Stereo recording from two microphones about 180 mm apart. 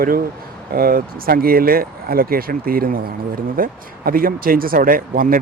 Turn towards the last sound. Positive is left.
turn(degrees=-50)  # may be behind; listen again after turning